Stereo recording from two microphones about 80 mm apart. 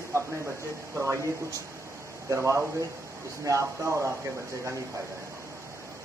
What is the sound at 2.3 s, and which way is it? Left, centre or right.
Speech, right.